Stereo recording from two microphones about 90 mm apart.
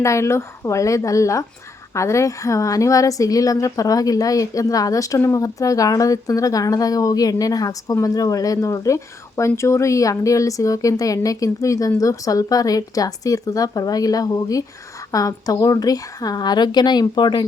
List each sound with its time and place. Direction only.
0.0 s speech: 35° left (ahead or behind); by 17.4 s 55° left (ahead or behind)